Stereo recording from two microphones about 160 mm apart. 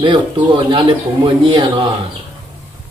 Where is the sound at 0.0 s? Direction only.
30° right (ahead or behind).